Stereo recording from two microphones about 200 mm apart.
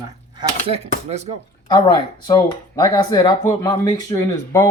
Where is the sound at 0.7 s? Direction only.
30° right (ahead or behind).